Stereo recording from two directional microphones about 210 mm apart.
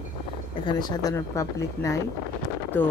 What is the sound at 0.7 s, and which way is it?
A woman's voice, 20° left (ahead or behind).